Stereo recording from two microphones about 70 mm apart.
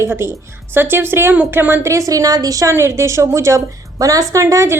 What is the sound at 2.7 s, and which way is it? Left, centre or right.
Speech, right.